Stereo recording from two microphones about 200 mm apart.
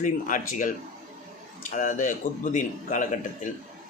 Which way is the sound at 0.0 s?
40° left (ahead or behind).